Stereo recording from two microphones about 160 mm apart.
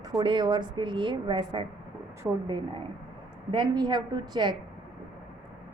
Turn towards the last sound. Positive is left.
turn(degrees=-30)  # may be behind; listen again after turning